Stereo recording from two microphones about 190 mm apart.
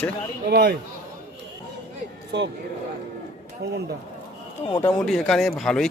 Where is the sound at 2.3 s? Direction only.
65° right (ahead or behind).